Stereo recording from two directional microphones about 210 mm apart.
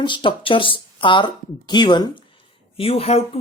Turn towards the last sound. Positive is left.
turn(degrees=30)  # may be behind; listen again after turning